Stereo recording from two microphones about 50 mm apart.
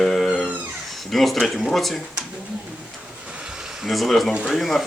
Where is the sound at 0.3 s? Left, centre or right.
Centre.